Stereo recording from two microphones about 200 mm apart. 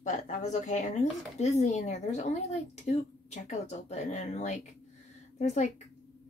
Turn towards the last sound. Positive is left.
turn(degrees=35)  # may be behind; listen again after turning